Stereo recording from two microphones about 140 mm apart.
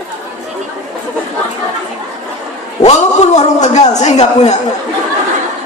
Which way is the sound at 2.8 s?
55° left (ahead or behind).